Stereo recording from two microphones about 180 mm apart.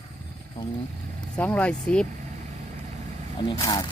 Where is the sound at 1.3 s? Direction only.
5° left (ahead or behind).